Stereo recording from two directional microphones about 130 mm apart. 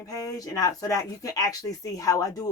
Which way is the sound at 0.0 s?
25° left (ahead or behind).